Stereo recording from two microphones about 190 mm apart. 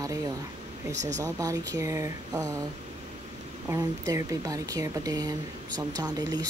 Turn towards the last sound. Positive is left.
turn(degrees=-20)  # may be behind; listen again after turning